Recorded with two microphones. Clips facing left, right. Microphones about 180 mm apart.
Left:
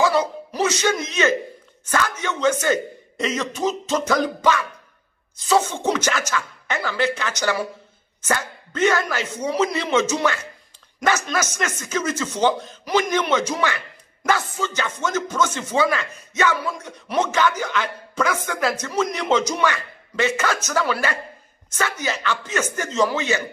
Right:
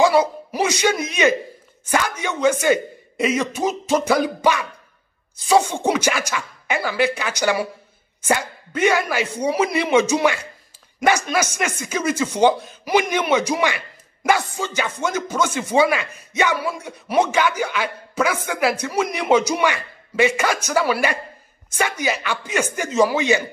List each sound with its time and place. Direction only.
0.0 s a man's voice: 10° right (ahead or behind)